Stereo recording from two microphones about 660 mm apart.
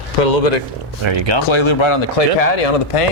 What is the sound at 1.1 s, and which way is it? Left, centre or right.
Speech, right.